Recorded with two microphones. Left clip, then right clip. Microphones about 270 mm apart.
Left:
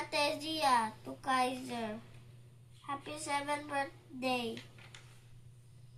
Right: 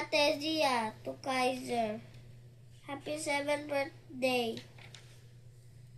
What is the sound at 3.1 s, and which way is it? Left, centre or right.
Speech, left.